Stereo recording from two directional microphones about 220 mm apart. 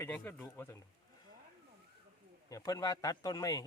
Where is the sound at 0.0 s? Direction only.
5° left (ahead or behind).